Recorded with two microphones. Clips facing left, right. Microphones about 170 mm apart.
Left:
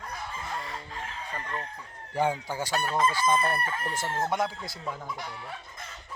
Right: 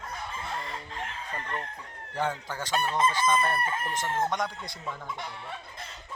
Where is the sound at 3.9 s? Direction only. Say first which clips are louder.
Left 1 dB; 10° left (ahead or behind).